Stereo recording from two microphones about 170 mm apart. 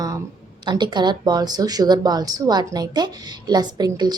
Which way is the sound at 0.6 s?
25° right (ahead or behind).